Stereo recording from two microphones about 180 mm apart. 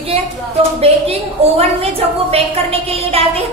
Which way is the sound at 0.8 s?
35° right (ahead or behind).